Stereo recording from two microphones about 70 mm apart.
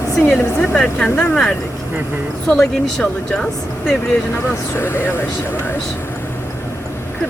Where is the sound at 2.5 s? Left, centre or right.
Centre.